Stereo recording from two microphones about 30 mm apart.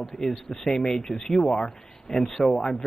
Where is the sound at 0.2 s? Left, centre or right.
Centre.